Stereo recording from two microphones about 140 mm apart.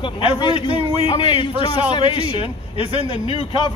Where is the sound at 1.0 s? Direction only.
40° left (ahead or behind).